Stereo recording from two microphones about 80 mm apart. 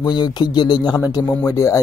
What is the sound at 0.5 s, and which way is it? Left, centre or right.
Speech, left.